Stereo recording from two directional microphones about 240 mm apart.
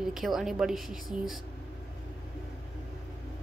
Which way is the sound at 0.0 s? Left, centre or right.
Centre.